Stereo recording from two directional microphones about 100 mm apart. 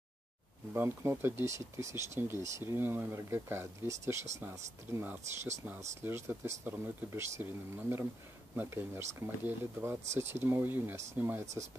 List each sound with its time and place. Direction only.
0.7 s speech: 25° right (ahead or behind)
8.5 s speech: 20° right (ahead or behind)